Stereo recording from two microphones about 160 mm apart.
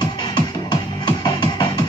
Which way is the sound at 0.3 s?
25° left (ahead or behind).